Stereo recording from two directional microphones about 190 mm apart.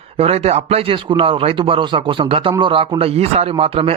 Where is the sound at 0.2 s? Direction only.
35° right (ahead or behind).